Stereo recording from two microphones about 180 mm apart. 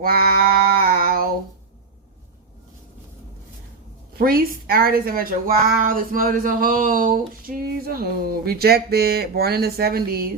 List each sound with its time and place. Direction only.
0.0 s a woman's voice: 55° right (ahead or behind)
0.8 s a sound: 55° right (ahead or behind)
4.2 s a woman's voice: 55° right (ahead or behind)